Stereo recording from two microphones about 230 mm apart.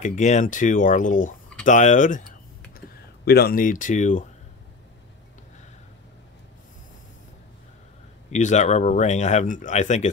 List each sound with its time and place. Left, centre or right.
0.0 s speech: left
3.3 s speech: left
8.3 s speech: left